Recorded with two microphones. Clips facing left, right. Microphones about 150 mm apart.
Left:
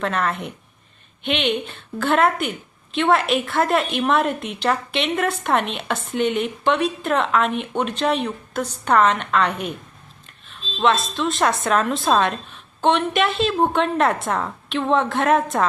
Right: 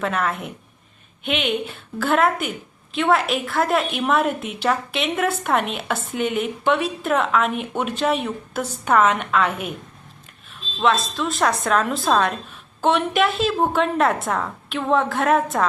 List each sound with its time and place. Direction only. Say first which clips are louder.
0.0 s a woman's voice: even; 5° right (ahead or behind)
10.8 s a woman's voice: left 1 dB; centre (ahead or behind)